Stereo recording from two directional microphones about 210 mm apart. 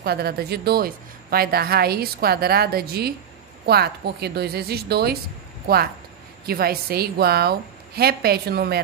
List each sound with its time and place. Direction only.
0.0 s a woman's voice: 50° right (ahead or behind)
6.4 s a woman's voice: 45° right (ahead or behind)